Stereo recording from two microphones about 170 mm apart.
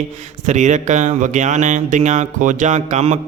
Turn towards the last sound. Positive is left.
turn(degrees=-40)  # may be behind; listen again after turning